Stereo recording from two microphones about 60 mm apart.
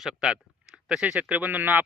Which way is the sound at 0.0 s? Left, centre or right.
Centre.